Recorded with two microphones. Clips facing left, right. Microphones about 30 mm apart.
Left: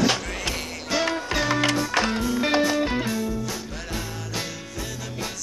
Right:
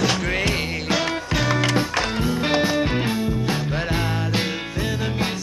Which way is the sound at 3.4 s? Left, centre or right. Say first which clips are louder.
Right 8 dB; right.